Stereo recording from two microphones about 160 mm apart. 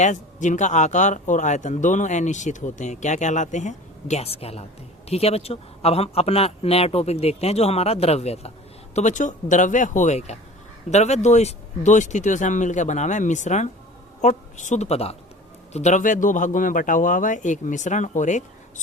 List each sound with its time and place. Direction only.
0.0 s a man's voice: 50° left (ahead or behind)